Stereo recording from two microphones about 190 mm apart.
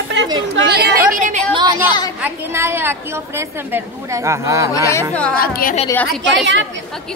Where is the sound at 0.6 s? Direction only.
60° right (ahead or behind); by 1.4 s 45° right (ahead or behind).